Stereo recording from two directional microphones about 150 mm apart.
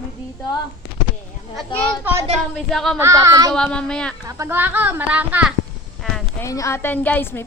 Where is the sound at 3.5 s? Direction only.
5° left (ahead or behind).